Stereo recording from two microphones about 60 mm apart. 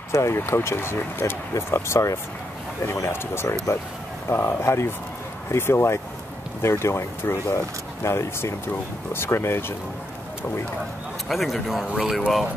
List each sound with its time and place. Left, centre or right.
0.1 s speech: left
1.5 s speech: left
3.7 s speech: left
4.3 s speech: left
11.2 s speech: centre